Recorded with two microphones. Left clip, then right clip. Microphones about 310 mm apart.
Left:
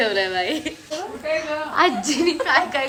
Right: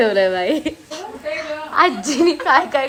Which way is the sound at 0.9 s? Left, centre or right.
Centre.